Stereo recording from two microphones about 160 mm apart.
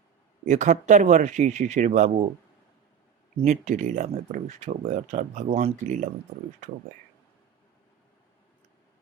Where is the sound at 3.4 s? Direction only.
45° right (ahead or behind).